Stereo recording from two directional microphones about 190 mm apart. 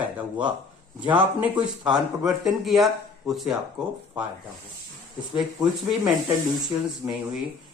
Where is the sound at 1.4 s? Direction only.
5° right (ahead or behind).